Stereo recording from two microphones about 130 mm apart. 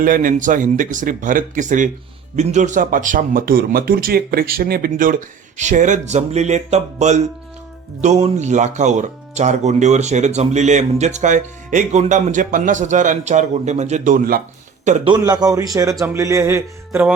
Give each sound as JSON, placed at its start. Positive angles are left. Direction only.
{"t": 0.0, "sound": "speech", "side_deg": -90}
{"t": 2.3, "sound": "a man's voice", "side_deg": -65}
{"t": 5.5, "sound": "speech", "side_deg": -70}
{"t": 15.0, "sound": "speech", "side_deg": -35}